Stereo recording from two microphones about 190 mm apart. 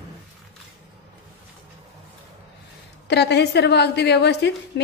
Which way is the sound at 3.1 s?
65° left (ahead or behind).